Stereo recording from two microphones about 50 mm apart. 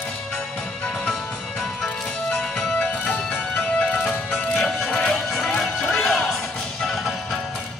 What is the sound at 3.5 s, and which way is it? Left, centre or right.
Music, centre.